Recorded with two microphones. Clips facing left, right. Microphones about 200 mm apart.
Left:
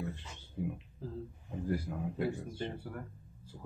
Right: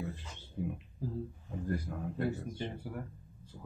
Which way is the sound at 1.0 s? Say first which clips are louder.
Right 4 dB; 10° right (ahead or behind).